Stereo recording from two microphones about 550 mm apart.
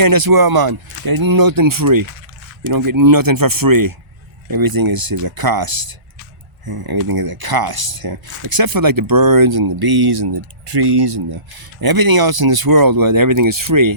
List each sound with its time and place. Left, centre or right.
0.0 s speech: right